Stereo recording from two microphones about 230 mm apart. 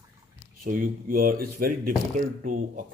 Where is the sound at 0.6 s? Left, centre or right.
Right.